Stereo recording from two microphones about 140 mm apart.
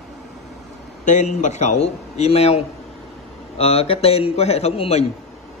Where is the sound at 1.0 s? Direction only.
60° left (ahead or behind).